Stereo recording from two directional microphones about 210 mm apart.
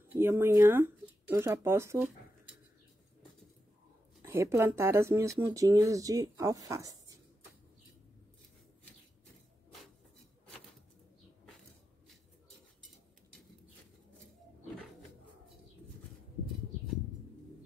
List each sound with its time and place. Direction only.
0.1 s speech: 10° right (ahead or behind)
4.2 s speech: 15° right (ahead or behind)